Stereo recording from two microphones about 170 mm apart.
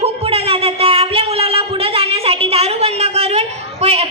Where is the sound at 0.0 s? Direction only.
35° right (ahead or behind).